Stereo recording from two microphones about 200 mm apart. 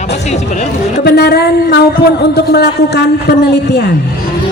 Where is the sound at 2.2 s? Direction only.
55° left (ahead or behind).